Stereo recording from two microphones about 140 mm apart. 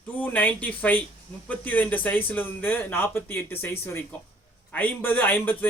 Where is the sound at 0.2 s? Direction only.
10° left (ahead or behind).